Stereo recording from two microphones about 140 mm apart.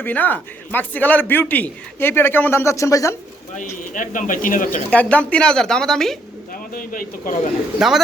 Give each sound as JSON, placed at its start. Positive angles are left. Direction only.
{"t": 0.0, "sound": "a man's voice", "side_deg": 15}
{"t": 3.6, "sound": "speech", "side_deg": 70}
{"t": 4.9, "sound": "a man's voice", "side_deg": 10}
{"t": 6.5, "sound": "speech", "side_deg": 90}
{"t": 7.8, "sound": "speech", "side_deg": -5}